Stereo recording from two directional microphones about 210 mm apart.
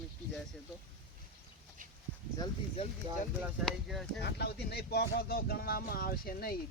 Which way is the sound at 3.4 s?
Centre (ahead or behind).